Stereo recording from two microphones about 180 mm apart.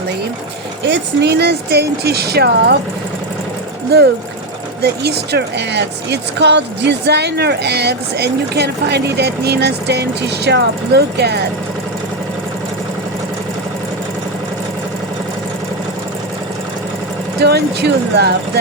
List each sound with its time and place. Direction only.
0.9 s speech: 75° right (ahead or behind)
4.8 s speech: 65° right (ahead or behind)
17.4 s speech: 65° right (ahead or behind)